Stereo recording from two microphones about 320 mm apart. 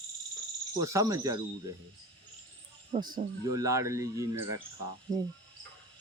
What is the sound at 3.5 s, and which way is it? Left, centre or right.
Speech, centre.